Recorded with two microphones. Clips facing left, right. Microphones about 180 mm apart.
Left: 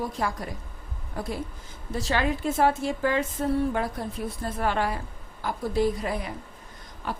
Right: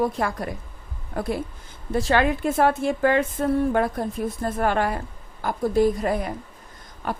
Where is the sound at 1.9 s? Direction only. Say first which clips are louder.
Right 6 dB; 60° right (ahead or behind).